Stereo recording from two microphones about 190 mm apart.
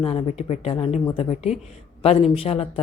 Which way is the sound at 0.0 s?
30° left (ahead or behind).